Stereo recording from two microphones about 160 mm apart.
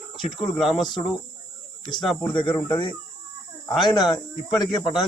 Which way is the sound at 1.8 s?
30° left (ahead or behind).